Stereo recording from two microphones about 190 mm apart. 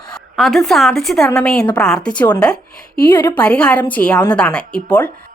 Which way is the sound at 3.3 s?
5° left (ahead or behind).